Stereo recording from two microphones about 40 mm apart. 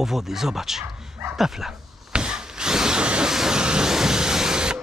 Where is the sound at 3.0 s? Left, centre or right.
Right.